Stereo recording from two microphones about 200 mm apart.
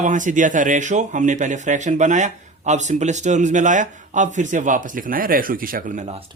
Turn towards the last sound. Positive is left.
turn(degrees=-35)  # may be behind; listen again after turning